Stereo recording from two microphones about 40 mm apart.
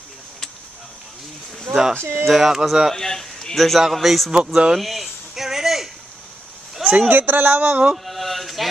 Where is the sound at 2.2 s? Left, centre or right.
Centre.